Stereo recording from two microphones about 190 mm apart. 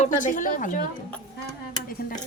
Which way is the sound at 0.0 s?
45° left (ahead or behind).